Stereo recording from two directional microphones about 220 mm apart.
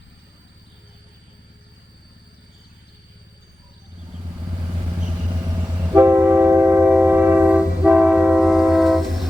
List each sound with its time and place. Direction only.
5.8 s train: 10° right (ahead or behind)